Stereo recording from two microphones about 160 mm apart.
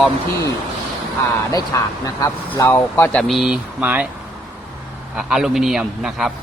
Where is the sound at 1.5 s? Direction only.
20° left (ahead or behind); by 4.0 s 10° right (ahead or behind).